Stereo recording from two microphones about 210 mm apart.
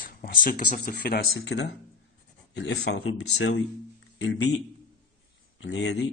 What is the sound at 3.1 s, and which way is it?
Speech, 65° left (ahead or behind).